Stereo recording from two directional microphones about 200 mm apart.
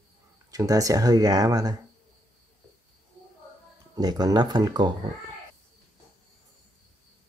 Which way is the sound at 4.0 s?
20° right (ahead or behind).